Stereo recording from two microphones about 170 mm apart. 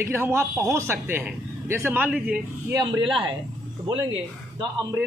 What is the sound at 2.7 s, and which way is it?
Speech, 25° right (ahead or behind).